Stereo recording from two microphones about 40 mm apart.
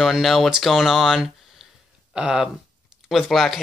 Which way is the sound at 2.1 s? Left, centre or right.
Right.